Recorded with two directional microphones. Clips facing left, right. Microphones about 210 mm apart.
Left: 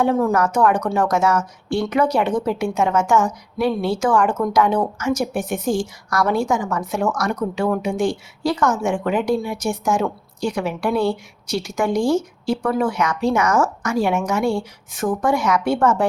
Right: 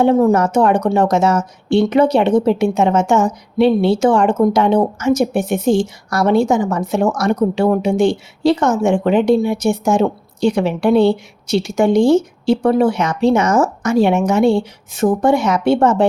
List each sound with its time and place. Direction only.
0.0 s a woman's voice: 25° right (ahead or behind)